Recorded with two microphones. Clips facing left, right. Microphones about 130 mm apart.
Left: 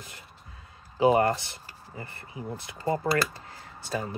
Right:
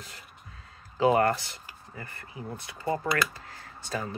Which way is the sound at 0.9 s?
20° left (ahead or behind).